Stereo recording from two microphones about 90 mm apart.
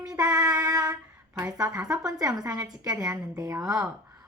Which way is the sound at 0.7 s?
45° right (ahead or behind).